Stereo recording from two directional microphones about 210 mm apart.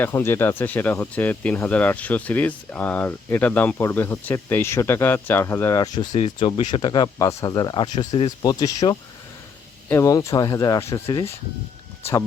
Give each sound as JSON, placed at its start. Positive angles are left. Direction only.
{"t": 0.0, "sound": "speech", "side_deg": 10}
{"t": 6.1, "sound": "speech", "side_deg": 30}
{"t": 11.0, "sound": "speech", "side_deg": 25}